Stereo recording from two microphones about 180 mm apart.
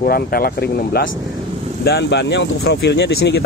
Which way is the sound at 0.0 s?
55° left (ahead or behind).